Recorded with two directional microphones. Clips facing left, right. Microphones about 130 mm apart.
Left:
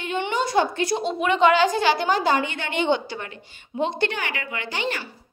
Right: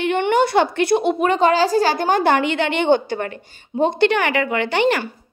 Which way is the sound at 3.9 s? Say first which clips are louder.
Right 10 dB; 70° right (ahead or behind).